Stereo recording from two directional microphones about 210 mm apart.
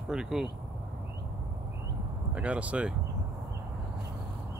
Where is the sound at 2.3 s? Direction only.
5° right (ahead or behind).